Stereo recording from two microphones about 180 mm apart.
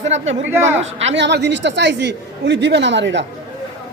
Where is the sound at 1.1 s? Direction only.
75° right (ahead or behind).